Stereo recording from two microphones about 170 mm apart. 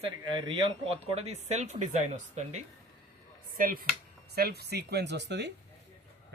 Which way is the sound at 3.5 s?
55° right (ahead or behind).